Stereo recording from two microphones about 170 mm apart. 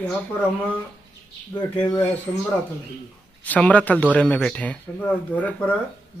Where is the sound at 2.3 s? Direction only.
10° left (ahead or behind).